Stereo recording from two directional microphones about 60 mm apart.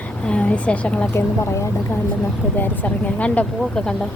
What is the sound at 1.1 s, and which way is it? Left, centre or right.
Speech, left.